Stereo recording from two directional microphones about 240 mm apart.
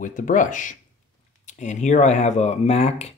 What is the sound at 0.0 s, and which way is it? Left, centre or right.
Speech, left.